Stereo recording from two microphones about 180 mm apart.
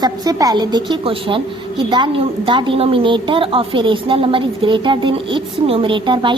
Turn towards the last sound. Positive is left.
turn(degrees=-25)  # may be behind; listen again after turning